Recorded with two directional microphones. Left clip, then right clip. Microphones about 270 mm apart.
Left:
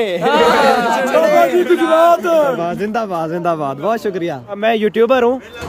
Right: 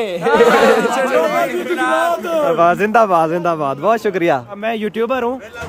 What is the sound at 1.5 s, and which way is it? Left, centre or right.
Speech, centre.